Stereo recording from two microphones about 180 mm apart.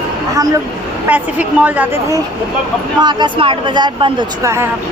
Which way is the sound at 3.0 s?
25° right (ahead or behind).